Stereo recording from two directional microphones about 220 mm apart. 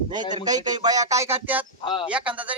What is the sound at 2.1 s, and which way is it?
Speech, 5° right (ahead or behind).